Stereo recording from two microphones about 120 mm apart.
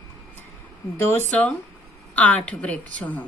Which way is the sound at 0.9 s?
25° left (ahead or behind).